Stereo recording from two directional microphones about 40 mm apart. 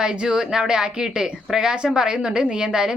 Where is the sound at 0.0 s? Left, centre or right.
Centre.